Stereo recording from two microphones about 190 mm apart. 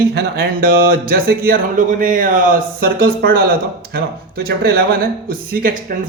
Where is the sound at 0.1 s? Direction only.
55° right (ahead or behind).